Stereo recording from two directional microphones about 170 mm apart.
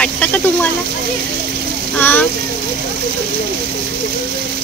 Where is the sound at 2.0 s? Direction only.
10° left (ahead or behind).